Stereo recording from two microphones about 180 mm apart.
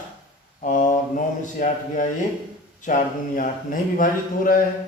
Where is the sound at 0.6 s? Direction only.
45° left (ahead or behind).